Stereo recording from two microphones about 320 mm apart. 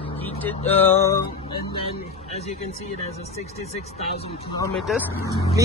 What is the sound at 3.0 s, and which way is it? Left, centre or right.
Speech, centre.